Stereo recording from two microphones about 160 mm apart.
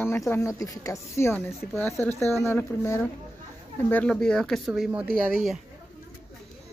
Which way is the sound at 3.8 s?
10° left (ahead or behind).